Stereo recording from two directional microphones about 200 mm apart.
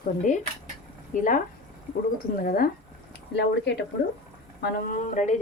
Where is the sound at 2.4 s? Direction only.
45° left (ahead or behind).